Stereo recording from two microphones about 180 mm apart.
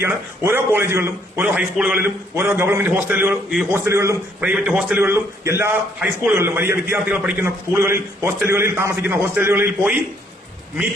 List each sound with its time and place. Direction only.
0.0 s a man's voice: 15° right (ahead or behind)
4.4 s a man's voice: 5° right (ahead or behind)